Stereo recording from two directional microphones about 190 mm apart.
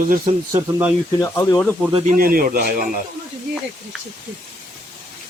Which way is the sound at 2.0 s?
50° right (ahead or behind).